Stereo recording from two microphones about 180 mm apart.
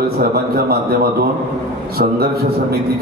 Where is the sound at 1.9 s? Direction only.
60° right (ahead or behind).